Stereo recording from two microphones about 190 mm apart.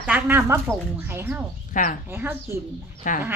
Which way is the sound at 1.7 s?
45° left (ahead or behind).